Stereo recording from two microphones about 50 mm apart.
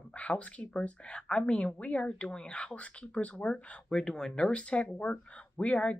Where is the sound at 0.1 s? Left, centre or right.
Left.